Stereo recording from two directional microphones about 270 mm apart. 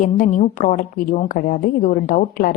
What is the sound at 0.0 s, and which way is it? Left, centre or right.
A woman's voice, left.